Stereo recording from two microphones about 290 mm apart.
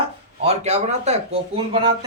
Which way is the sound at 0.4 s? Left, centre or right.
Right.